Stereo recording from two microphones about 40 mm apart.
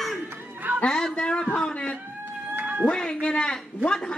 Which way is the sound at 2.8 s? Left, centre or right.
Left.